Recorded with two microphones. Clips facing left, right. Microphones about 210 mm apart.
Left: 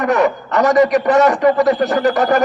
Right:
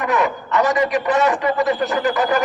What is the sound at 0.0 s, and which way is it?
A man's voice, 45° left (ahead or behind).